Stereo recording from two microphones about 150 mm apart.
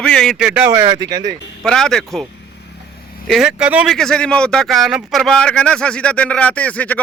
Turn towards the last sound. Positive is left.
turn(degrees=10)  # may be behind; listen again after turning